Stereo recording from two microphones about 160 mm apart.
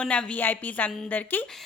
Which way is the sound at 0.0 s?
5° left (ahead or behind).